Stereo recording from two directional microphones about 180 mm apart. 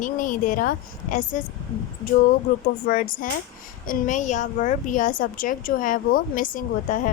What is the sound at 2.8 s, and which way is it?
A woman's voice, 50° left (ahead or behind).